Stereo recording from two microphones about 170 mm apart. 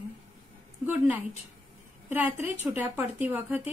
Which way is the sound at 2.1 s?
10° right (ahead or behind).